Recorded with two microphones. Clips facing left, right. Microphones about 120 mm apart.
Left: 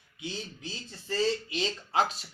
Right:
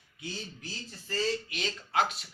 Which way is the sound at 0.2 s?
20° left (ahead or behind).